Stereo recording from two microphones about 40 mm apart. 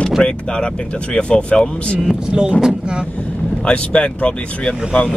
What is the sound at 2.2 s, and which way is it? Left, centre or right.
Speech, right.